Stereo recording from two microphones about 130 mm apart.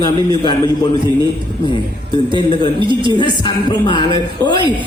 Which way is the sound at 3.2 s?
35° left (ahead or behind).